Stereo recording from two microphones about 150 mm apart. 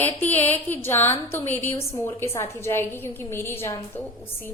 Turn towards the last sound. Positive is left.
turn(degrees=15)  # may be behind; listen again after turning